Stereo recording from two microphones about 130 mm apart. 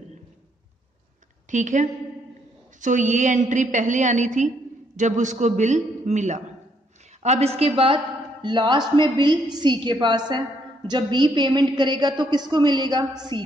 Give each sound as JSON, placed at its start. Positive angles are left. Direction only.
{"t": 1.5, "sound": "a woman's voice", "side_deg": -70}
{"t": 7.2, "sound": "a woman's voice", "side_deg": -50}